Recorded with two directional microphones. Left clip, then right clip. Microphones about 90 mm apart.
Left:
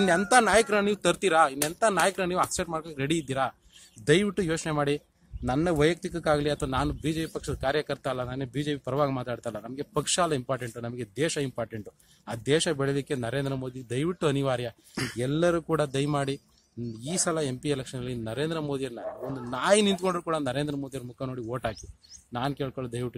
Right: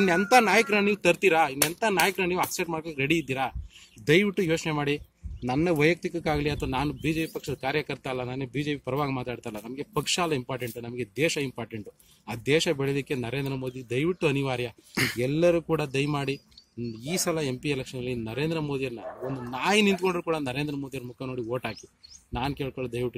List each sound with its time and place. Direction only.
0.0 s a man's voice: 40° left (ahead or behind); by 23.1 s 60° left (ahead or behind)